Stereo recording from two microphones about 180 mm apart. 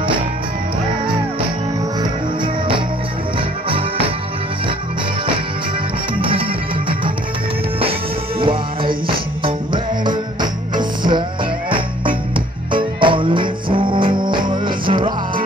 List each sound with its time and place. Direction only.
2.0 s music: 25° right (ahead or behind)
6.1 s music: 30° right (ahead or behind)
8.4 s music: 30° right (ahead or behind)
12.7 s music: 25° right (ahead or behind)